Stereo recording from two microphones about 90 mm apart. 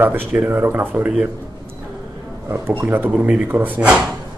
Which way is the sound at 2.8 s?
20° right (ahead or behind).